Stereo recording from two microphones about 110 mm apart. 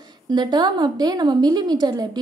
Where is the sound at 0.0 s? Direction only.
40° right (ahead or behind).